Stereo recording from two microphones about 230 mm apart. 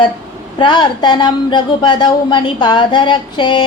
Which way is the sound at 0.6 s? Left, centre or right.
Centre.